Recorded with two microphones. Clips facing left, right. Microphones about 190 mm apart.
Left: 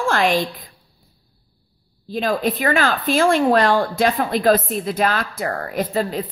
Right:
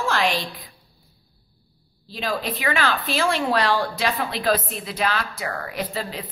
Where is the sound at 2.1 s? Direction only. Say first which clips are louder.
Left 7 dB; 50° left (ahead or behind).